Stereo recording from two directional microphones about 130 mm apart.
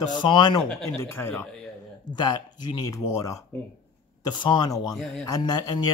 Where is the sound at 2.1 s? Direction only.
35° left (ahead or behind).